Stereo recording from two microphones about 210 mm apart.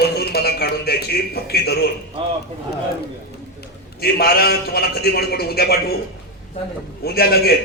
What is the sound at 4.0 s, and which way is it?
A man's voice, 45° left (ahead or behind).